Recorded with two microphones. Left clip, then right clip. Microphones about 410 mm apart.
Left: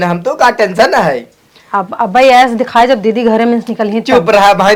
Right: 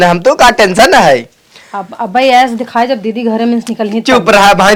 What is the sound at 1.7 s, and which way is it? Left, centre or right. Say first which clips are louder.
Speech: left 3 dB; centre.